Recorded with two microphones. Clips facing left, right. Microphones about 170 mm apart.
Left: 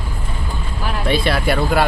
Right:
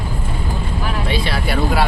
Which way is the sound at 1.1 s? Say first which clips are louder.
Left 5 dB; 55° left (ahead or behind).